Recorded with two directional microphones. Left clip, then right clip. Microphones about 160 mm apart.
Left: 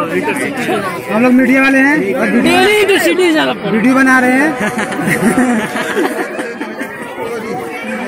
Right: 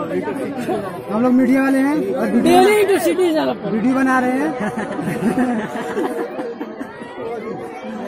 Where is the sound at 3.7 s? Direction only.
10° right (ahead or behind).